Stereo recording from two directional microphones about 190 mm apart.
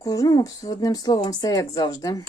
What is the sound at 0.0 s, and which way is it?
Speech, 20° left (ahead or behind).